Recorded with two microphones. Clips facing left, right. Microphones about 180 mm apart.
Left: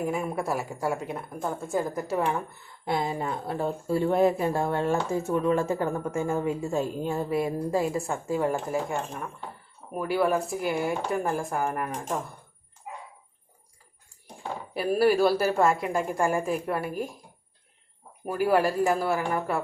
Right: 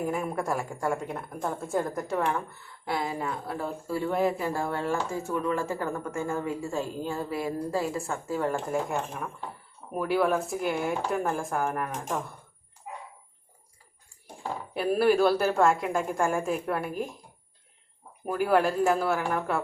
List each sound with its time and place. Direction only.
0.0 s a woman's voice: 5° left (ahead or behind)
2.8 s a woman's voice: 25° left (ahead or behind); by 12.2 s 5° left (ahead or behind)
14.7 s a woman's voice: 5° left (ahead or behind)
18.3 s a woman's voice: 5° left (ahead or behind)